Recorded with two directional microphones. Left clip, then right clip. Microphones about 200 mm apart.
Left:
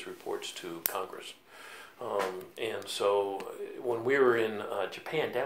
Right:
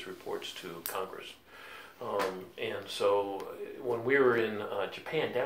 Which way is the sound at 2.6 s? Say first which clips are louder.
Even; 45° left (ahead or behind).